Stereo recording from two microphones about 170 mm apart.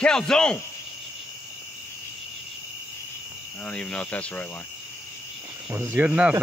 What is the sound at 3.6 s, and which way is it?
Speech, 5° left (ahead or behind).